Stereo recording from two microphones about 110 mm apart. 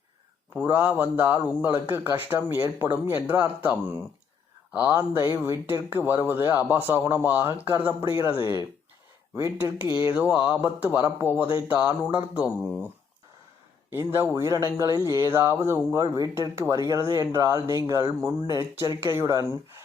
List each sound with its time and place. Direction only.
0.5 s a man's voice: 15° right (ahead or behind)
5.3 s a man's voice: 20° right (ahead or behind)
13.9 s speech: 20° right (ahead or behind)